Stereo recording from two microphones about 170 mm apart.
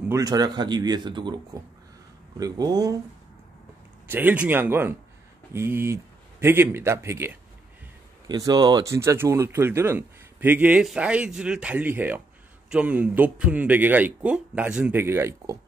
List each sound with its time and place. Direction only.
0.1 s speech: 20° right (ahead or behind)
4.1 s speech: 10° right (ahead or behind)